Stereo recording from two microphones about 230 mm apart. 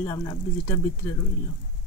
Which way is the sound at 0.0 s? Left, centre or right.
Centre.